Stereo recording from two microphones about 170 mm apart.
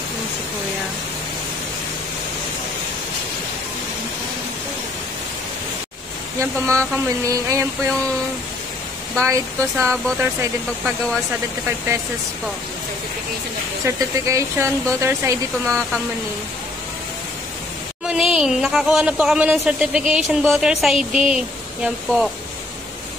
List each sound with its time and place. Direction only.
6.4 s speech: 15° right (ahead or behind)
9.2 s speech: 15° right (ahead or behind)
13.8 s speech: 15° right (ahead or behind)
18.0 s speech: 5° right (ahead or behind)